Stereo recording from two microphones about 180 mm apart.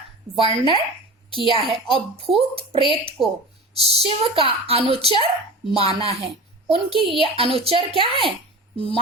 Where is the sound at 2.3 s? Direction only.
30° right (ahead or behind).